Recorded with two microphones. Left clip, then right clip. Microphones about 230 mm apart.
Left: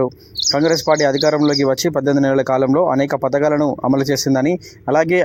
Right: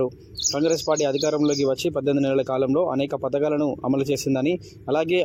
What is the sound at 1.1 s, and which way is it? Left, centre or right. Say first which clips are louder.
Speech: left 7 dB; left.